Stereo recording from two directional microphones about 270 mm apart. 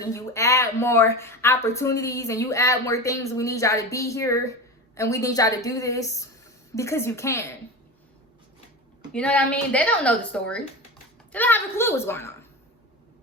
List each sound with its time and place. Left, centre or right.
0.0 s speech: centre
9.1 s speech: centre